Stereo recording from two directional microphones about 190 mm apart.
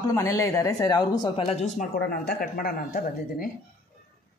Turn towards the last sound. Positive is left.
turn(degrees=50)  # may be behind; listen again after turning